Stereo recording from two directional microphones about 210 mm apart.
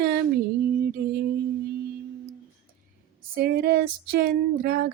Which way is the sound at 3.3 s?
50° right (ahead or behind).